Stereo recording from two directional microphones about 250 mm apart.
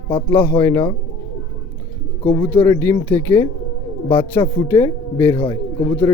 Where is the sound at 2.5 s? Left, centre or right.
Centre.